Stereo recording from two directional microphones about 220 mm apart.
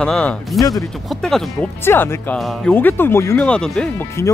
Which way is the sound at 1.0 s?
Centre (ahead or behind).